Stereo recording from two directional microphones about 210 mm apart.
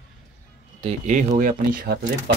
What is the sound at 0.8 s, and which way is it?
Speech, 35° right (ahead or behind).